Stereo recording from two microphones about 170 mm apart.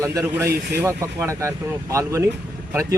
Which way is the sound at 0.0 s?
20° right (ahead or behind).